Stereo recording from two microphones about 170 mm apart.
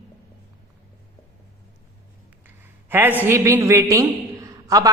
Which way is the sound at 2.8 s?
10° right (ahead or behind).